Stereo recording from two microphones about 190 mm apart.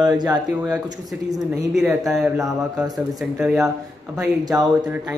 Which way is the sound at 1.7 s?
5° right (ahead or behind).